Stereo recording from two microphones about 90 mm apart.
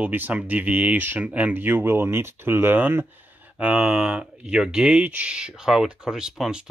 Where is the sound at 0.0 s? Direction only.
20° right (ahead or behind).